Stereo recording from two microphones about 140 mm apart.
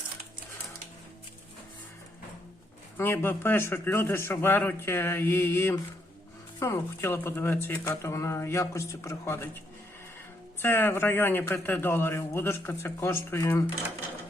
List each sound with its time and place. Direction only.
3.0 s a man's voice: 15° left (ahead or behind)
10.6 s a man's voice: 15° left (ahead or behind)